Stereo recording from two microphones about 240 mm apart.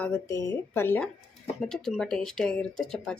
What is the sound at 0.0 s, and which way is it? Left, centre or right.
Speech, centre.